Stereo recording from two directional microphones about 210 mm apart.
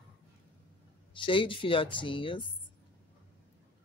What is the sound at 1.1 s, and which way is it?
Speech, 25° left (ahead or behind).